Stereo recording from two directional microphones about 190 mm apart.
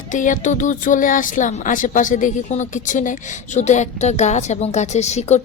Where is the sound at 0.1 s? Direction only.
40° left (ahead or behind).